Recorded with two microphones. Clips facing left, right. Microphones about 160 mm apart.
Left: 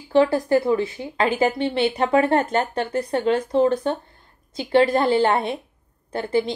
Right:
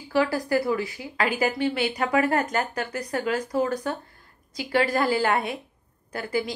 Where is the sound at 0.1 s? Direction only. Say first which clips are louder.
Left 6 dB; 25° left (ahead or behind).